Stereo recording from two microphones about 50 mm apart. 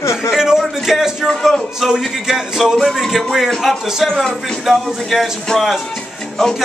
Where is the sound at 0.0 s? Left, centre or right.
Left.